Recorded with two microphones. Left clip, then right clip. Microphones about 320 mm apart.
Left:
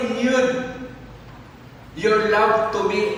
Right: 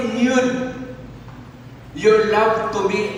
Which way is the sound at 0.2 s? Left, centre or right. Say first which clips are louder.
Right 2 dB; centre.